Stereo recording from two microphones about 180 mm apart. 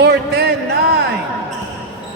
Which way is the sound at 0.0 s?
65° right (ahead or behind).